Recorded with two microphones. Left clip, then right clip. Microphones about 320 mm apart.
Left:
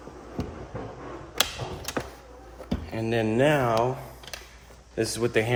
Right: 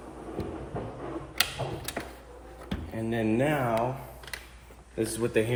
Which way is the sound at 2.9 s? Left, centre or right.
Left.